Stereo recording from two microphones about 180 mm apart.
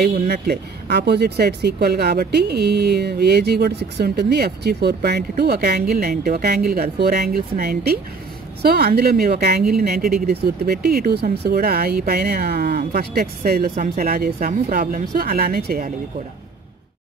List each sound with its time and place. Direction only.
0.0 s speech: 60° right (ahead or behind)